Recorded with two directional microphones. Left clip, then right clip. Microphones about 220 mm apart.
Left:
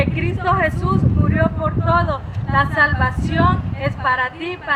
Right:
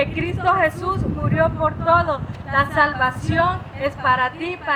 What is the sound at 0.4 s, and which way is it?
Speech, 15° right (ahead or behind).